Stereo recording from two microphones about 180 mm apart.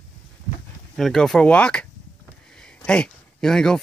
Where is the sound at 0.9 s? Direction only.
Centre (ahead or behind).